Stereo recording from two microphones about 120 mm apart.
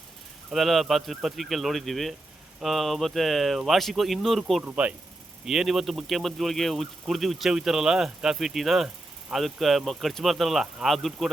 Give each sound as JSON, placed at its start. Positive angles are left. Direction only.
{"t": 0.5, "sound": "a man's voice", "side_deg": 0}
{"t": 4.6, "sound": "a man's voice", "side_deg": -10}